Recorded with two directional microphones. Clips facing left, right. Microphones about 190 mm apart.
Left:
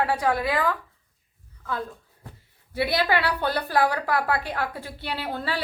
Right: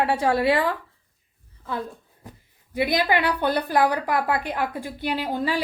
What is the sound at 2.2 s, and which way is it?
A woman's voice, 15° right (ahead or behind).